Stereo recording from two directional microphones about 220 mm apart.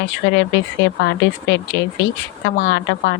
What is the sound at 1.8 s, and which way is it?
Speech, 55° left (ahead or behind).